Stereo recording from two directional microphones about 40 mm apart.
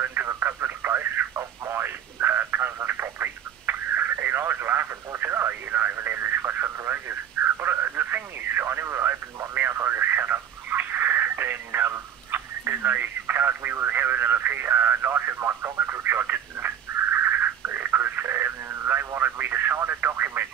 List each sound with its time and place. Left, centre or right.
0.0 s radio: right
1.7 s telephone: right
5.5 s radio: right